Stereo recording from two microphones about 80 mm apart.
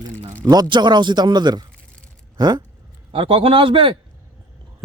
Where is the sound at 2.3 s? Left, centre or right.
Right.